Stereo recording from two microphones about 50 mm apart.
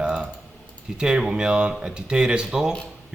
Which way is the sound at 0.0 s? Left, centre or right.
Centre.